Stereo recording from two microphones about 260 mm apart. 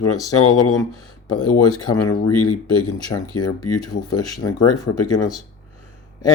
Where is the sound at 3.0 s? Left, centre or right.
Centre.